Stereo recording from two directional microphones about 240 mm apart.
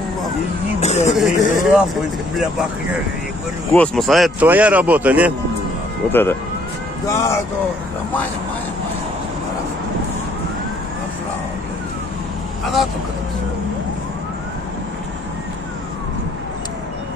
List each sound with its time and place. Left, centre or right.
0.7 s speech: left
1.1 s speech: centre
3.7 s speech: centre
7.1 s speech: centre